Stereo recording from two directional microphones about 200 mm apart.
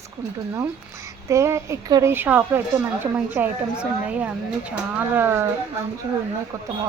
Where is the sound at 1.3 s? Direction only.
15° right (ahead or behind).